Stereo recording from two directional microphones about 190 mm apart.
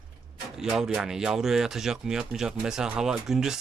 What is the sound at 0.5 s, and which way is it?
Speech, 5° right (ahead or behind).